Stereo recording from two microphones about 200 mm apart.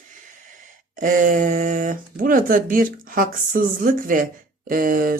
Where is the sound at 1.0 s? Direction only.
40° right (ahead or behind).